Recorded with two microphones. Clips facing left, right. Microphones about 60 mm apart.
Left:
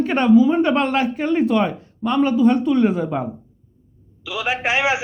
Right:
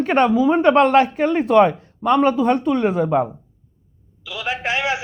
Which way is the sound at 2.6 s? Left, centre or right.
Right.